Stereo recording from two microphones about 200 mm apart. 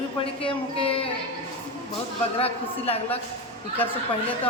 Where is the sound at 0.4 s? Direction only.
30° left (ahead or behind).